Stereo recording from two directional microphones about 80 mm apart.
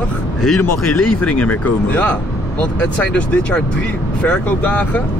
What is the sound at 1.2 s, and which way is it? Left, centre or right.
Speech, centre.